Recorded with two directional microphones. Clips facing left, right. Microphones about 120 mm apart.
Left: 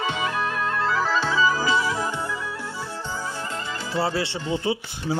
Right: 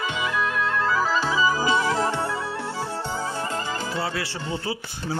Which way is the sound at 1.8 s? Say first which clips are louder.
Right 2 dB; 65° right (ahead or behind).